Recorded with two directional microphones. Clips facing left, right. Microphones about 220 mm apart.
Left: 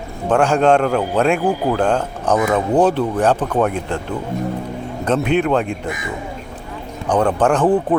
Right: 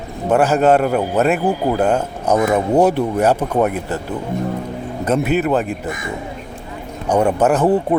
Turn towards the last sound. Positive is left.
turn(degrees=-10)  # may be behind; listen again after turning